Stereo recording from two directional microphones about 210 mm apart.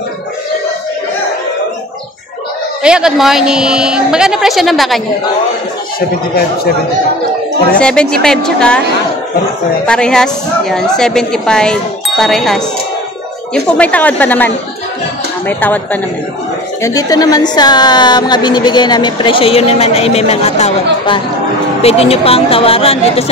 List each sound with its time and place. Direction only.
2.8 s a woman's voice: 5° right (ahead or behind)
5.9 s speech: 50° left (ahead or behind)
7.7 s a woman's voice: 5° left (ahead or behind)
9.8 s a woman's voice: 5° left (ahead or behind)
13.7 s a woman's voice: 5° left (ahead or behind); by 23.3 s 30° left (ahead or behind)